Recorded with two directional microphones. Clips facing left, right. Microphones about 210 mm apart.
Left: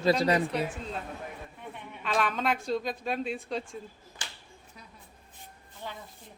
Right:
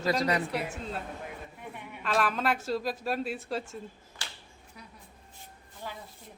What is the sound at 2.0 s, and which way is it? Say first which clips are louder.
Speech: even; centre (ahead or behind).